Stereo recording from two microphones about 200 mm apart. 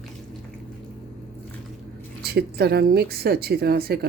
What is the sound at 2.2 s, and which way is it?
Speech, 50° right (ahead or behind).